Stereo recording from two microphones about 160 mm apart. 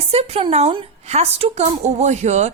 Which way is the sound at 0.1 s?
40° right (ahead or behind).